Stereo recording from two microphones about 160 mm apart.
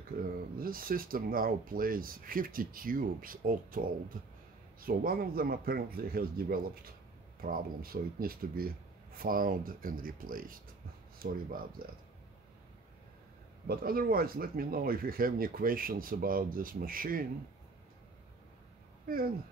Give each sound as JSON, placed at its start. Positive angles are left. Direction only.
{"t": 0.6, "sound": "speech", "side_deg": -65}
{"t": 13.7, "sound": "speech", "side_deg": -65}
{"t": 19.0, "sound": "speech", "side_deg": -65}